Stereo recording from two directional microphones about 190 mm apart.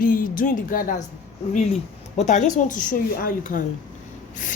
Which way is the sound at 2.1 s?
40° left (ahead or behind).